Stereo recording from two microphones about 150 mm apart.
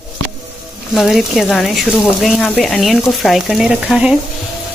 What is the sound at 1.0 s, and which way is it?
Speech, centre (ahead or behind).